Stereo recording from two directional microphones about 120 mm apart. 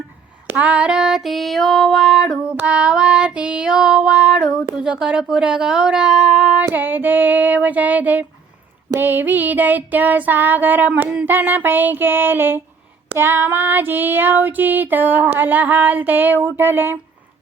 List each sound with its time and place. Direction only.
0.4 s female singing: 10° right (ahead or behind)